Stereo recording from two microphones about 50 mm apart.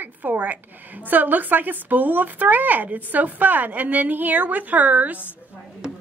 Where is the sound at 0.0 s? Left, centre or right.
Right.